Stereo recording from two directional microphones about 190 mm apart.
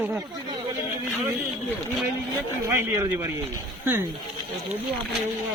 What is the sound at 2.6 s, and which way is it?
Speech, 15° right (ahead or behind).